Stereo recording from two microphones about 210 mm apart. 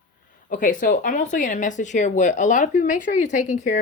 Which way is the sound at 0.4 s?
40° left (ahead or behind).